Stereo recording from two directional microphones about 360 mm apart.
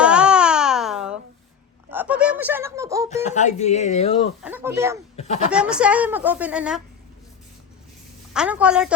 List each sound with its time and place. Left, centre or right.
0.0 s baby cry: centre
1.9 s speech: centre
3.2 s speech: centre
4.4 s speech: centre
5.1 s speech: centre
5.5 s speech: centre
8.3 s speech: centre